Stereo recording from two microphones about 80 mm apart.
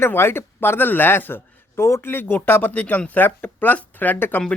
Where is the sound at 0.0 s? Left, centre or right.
Left.